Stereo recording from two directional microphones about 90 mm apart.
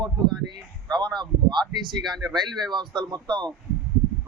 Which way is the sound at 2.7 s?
55° right (ahead or behind).